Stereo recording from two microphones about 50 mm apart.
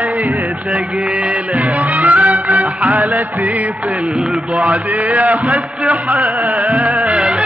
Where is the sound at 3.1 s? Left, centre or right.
Right.